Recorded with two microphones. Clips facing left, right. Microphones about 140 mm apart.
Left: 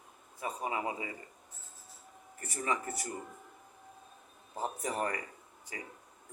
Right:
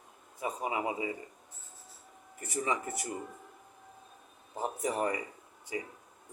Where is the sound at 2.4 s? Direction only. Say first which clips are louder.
Right 2 dB; 20° right (ahead or behind).